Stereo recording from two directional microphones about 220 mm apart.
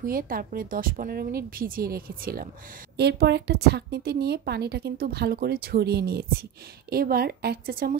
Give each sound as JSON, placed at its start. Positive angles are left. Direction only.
{"t": 0.0, "sound": "a woman's voice", "side_deg": -40}